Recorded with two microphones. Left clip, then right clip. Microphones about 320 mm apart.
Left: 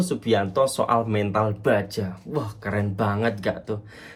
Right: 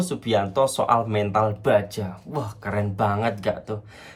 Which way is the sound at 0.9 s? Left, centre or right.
Centre.